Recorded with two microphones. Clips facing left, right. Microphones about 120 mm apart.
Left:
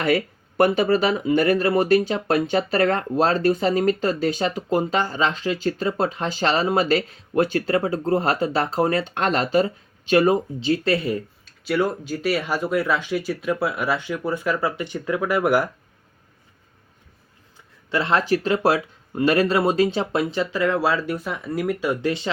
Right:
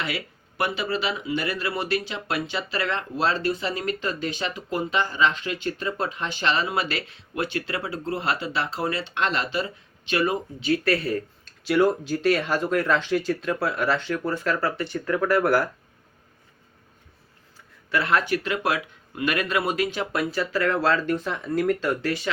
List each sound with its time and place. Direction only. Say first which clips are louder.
0.0 s speech: left 10 dB; 45° left (ahead or behind); by 11.5 s 15° left (ahead or behind)
11.6 s speech: right 2 dB; centre (ahead or behind)
17.9 s speech: left 3 dB; 25° left (ahead or behind)